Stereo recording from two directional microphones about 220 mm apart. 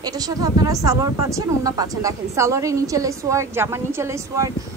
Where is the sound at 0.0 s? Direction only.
15° right (ahead or behind).